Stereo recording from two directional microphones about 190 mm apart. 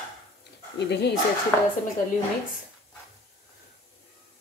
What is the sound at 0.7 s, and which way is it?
Speech, 65° left (ahead or behind).